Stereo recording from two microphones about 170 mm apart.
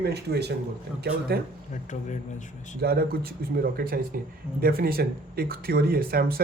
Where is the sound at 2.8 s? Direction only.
65° right (ahead or behind).